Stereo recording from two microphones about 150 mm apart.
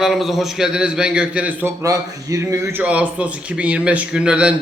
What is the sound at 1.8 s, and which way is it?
A man's voice, 20° right (ahead or behind).